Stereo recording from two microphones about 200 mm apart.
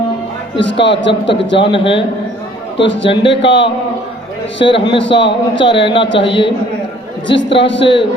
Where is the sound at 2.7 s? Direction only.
65° left (ahead or behind).